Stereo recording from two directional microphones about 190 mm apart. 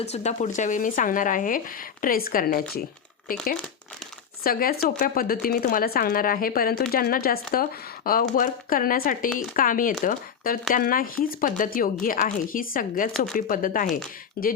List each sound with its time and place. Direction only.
0.0 s speech: 35° left (ahead or behind); by 14.5 s 55° left (ahead or behind)